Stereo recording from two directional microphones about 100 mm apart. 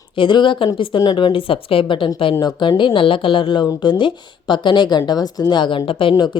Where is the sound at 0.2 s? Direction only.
55° left (ahead or behind).